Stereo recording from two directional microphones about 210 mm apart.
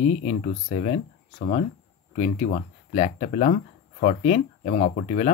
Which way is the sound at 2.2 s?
35° left (ahead or behind).